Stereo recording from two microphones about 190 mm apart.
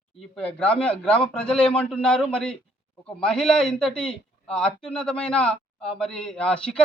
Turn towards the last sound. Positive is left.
turn(degrees=5)  # may be behind; listen again after turning